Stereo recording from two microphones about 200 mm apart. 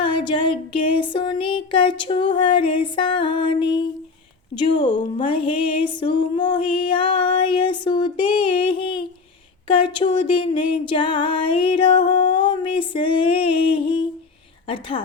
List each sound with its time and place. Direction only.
0.0 s speech: 25° left (ahead or behind)